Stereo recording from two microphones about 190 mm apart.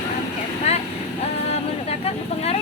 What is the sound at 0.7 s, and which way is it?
Vehicle, 35° left (ahead or behind).